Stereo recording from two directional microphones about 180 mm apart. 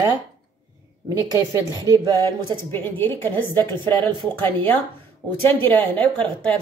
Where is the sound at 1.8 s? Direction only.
25° right (ahead or behind).